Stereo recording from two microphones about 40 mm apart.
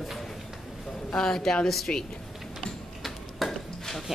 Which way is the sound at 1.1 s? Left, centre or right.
Centre.